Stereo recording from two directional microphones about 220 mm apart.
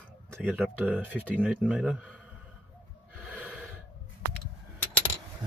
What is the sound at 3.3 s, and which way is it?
Gasp, 5° right (ahead or behind).